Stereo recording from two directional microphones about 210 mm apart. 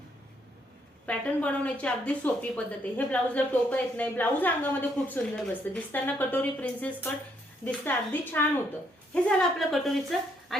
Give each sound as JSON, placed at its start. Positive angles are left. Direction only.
{"t": 1.0, "sound": "a woman's voice", "side_deg": 5}